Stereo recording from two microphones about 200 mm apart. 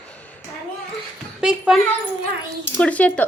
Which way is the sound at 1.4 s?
5° right (ahead or behind).